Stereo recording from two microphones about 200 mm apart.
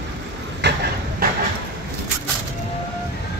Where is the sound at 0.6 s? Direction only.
55° right (ahead or behind).